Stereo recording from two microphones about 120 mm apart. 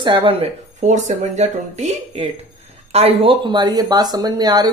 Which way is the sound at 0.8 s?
80° right.